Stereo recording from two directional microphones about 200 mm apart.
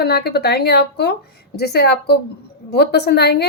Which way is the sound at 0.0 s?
50° left (ahead or behind).